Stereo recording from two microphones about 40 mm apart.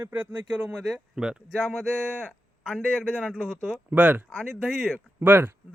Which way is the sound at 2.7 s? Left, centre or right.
Left.